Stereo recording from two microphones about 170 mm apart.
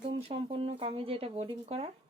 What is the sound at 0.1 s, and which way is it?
Speech, 35° right (ahead or behind).